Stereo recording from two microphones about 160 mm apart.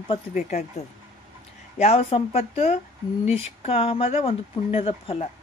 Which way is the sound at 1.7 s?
40° left (ahead or behind).